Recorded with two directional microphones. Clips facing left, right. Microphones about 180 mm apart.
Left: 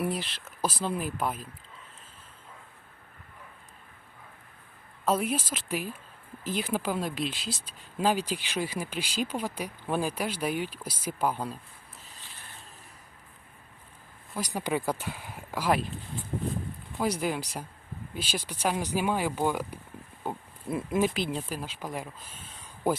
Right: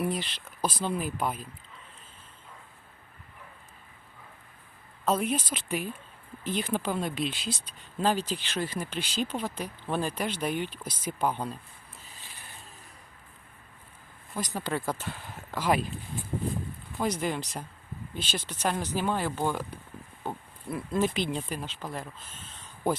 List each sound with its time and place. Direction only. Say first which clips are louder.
0.0 s speech: even; 5° left (ahead or behind)
5.0 s speech: even; 10° left (ahead or behind)
14.3 s speech: left 2 dB; 10° left (ahead or behind)
17.0 s speech: left 1 dB; 5° left (ahead or behind)
20.7 s speech: left 2 dB; 20° left (ahead or behind)
21.0 s speech: right 2 dB; 5° left (ahead or behind)